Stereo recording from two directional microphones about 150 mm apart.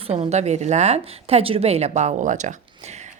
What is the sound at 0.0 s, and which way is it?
A woman's voice, 45° right (ahead or behind).